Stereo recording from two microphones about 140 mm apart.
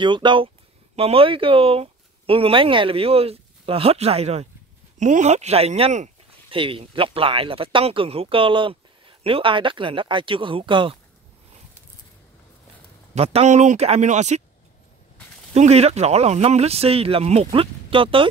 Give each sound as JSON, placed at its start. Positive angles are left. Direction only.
{"t": 0.0, "sound": "speech", "side_deg": -35}
{"t": 4.9, "sound": "speech", "side_deg": -60}
{"t": 6.5, "sound": "speech", "side_deg": -40}
{"t": 13.1, "sound": "speech", "side_deg": -50}
{"t": 15.5, "sound": "speech", "side_deg": -50}